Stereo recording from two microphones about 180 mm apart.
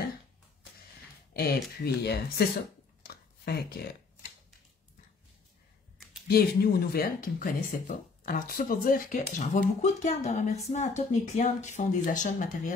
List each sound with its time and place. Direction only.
1.3 s speech: 60° left (ahead or behind)
6.2 s speech: 60° left (ahead or behind)